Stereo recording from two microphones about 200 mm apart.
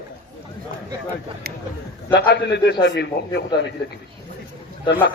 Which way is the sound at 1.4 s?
50° right (ahead or behind).